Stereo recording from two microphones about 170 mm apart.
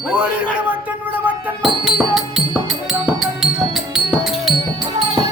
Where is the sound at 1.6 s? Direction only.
Centre (ahead or behind).